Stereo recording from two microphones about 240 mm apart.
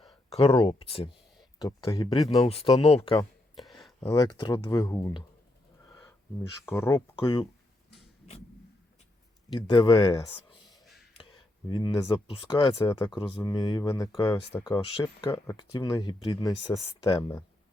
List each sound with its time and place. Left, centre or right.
0.1 s speech: left
3.5 s a sound: centre
4.1 s speech: centre
6.7 s speech: centre
7.2 s speech: left
9.5 s speech: centre